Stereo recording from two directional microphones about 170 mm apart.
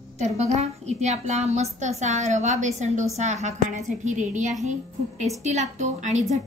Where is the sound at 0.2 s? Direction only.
40° right (ahead or behind).